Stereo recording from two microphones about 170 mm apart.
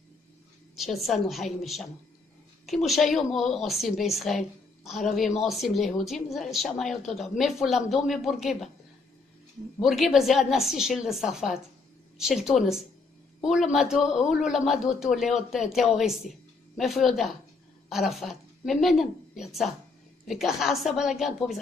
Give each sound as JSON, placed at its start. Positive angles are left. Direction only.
{"t": 0.7, "sound": "a man's voice", "side_deg": 0}
{"t": 9.8, "sound": "a man's voice", "side_deg": 0}